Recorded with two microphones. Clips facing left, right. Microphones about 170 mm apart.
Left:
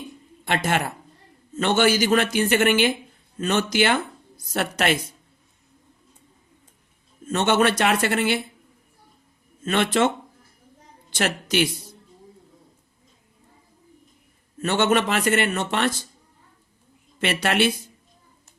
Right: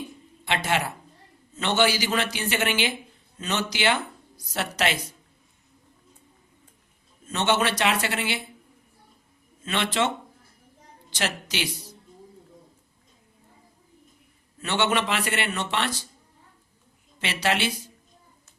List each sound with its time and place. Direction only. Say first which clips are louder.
0.4 s a man's voice: left 2 dB; 50° left (ahead or behind)
7.3 s a man's voice: left 4 dB; 50° left (ahead or behind)
9.6 s a man's voice: left 5 dB; 50° left (ahead or behind)
11.1 s a man's voice: left 6 dB; 50° left (ahead or behind)
14.6 s a man's voice: left 4 dB; 45° left (ahead or behind)
17.2 s speech: left 4 dB; 55° left (ahead or behind)